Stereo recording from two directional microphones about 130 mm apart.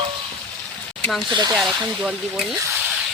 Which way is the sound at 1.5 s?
Centre (ahead or behind).